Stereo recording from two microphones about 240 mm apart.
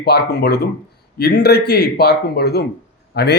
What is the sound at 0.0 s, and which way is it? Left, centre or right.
Speech, left.